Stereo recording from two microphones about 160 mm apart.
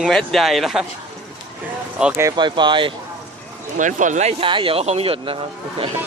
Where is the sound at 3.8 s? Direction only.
50° right (ahead or behind); by 5.4 s 35° right (ahead or behind).